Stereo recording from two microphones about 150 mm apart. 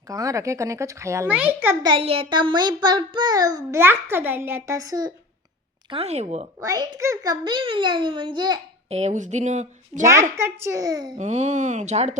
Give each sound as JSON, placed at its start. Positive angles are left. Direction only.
{"t": 0.1, "sound": "a child's voice", "side_deg": -20}
{"t": 1.8, "sound": "a child's voice", "side_deg": -35}
{"t": 5.9, "sound": "a woman's voice", "side_deg": -45}
{"t": 6.6, "sound": "a child's voice", "side_deg": -25}
{"t": 8.9, "sound": "a woman's voice", "side_deg": -45}
{"t": 10.3, "sound": "a child's voice", "side_deg": -15}
{"t": 11.2, "sound": "a woman's voice", "side_deg": -50}